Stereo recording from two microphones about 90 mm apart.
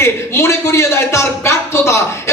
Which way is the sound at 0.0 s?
30° left (ahead or behind).